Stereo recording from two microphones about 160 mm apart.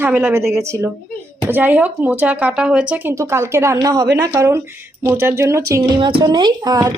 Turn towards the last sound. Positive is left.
turn(degrees=-25)  # may be behind; listen again after turning